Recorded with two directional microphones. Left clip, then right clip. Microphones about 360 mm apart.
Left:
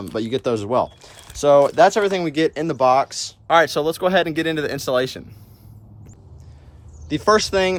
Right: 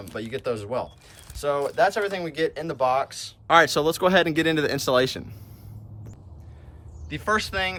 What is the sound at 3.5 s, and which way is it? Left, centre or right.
Speech, centre.